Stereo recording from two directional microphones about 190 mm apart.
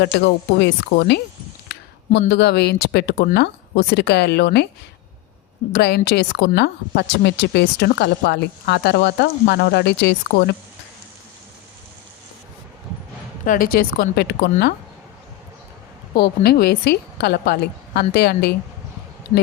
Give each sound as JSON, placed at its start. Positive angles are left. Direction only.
{"t": 0.0, "sound": "a woman's voice", "side_deg": 55}
{"t": 5.7, "sound": "a woman's voice", "side_deg": 60}
{"t": 13.4, "sound": "speech", "side_deg": 45}
{"t": 16.1, "sound": "a woman's voice", "side_deg": 55}